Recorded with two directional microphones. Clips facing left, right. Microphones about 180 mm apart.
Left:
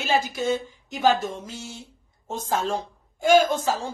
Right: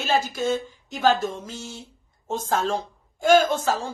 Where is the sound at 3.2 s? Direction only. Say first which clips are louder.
Even; 50° right (ahead or behind).